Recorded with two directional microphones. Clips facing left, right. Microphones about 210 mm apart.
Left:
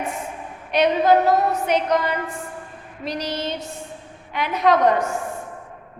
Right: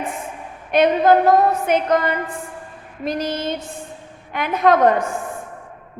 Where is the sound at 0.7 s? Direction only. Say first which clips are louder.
Right 2 dB; 50° right (ahead or behind).